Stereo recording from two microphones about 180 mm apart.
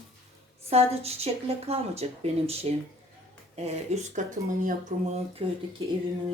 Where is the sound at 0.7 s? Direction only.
35° right (ahead or behind).